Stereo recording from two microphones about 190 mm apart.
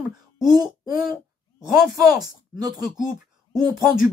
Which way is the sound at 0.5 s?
20° right (ahead or behind).